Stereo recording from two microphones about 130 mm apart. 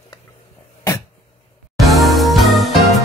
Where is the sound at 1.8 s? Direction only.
Centre (ahead or behind).